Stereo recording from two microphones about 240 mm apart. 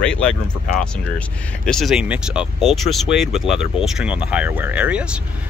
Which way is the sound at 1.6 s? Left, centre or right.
Centre.